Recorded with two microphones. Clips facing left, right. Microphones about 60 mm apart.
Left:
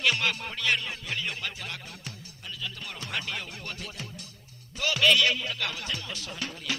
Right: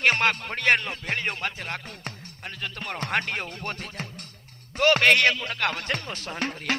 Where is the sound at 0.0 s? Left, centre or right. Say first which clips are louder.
Right 5 dB; right.